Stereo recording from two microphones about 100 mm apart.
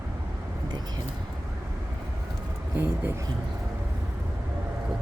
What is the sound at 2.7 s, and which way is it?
Speech, 20° right (ahead or behind).